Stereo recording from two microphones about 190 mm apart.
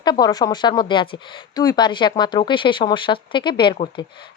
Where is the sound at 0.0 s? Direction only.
20° left (ahead or behind).